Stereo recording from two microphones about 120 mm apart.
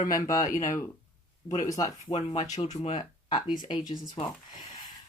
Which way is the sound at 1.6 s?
30° left (ahead or behind).